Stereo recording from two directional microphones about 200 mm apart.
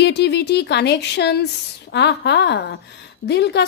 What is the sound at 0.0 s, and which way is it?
A woman's voice, 55° left (ahead or behind).